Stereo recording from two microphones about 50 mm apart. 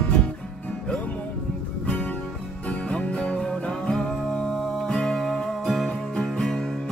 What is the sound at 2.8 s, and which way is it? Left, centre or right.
Music, left.